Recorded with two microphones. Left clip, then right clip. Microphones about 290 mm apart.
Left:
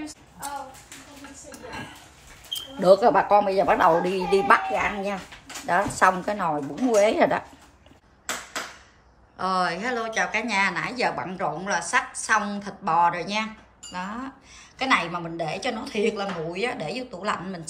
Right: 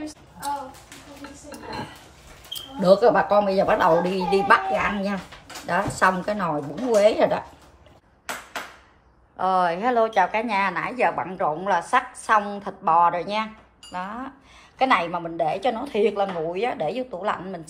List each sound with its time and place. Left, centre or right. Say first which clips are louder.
2.8 s a woman's voice: right 1 dB; left
9.4 s a woman's voice: right 4 dB; centre